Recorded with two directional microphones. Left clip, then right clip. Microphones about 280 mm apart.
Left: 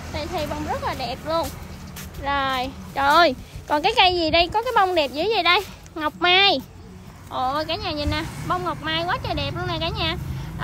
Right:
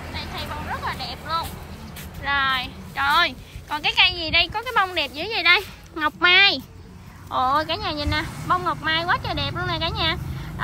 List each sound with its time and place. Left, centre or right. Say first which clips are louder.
0.7 s a woman's voice: left 2 dB; centre